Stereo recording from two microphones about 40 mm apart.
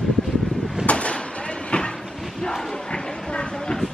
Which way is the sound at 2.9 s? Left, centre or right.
Left.